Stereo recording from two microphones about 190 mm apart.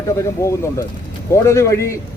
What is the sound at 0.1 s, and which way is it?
A man's voice, 15° left (ahead or behind).